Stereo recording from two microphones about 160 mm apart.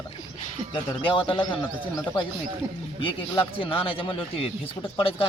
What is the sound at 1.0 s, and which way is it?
Speech, 30° left (ahead or behind).